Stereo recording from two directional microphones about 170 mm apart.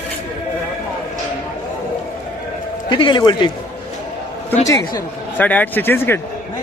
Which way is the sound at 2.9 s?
30° left (ahead or behind).